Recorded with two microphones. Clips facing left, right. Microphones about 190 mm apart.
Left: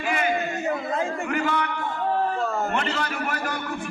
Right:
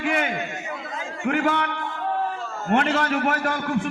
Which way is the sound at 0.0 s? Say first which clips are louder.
Right 2 dB; 75° right (ahead or behind).